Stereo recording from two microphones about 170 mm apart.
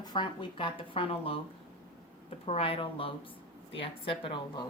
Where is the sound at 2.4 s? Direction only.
35° left (ahead or behind).